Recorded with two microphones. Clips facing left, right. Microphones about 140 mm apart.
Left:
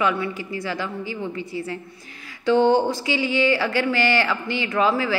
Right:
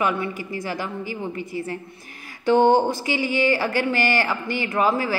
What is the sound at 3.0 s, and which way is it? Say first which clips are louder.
Speech: left 1 dB; 45° right (ahead or behind).